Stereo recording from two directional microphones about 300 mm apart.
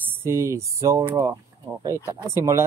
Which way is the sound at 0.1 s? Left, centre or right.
Centre.